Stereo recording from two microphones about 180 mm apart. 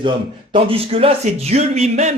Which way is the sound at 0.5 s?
35° right (ahead or behind).